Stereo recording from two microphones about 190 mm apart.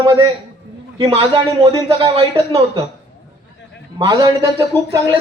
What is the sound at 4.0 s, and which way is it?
Speech, 20° right (ahead or behind).